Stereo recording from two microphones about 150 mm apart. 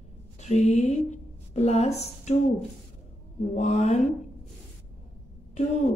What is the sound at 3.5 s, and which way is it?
Speech, 50° left (ahead or behind).